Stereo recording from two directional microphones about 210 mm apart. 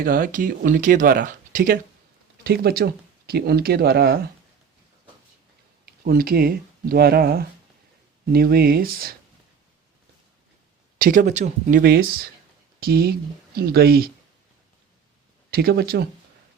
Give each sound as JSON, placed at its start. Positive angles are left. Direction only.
{"t": 0.0, "sound": "speech", "side_deg": -45}
{"t": 5.8, "sound": "speech", "side_deg": -45}
{"t": 10.9, "sound": "speech", "side_deg": -40}
{"t": 15.4, "sound": "speech", "side_deg": -50}